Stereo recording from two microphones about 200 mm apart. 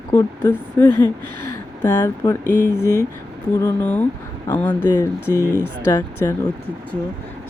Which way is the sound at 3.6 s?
10° left (ahead or behind).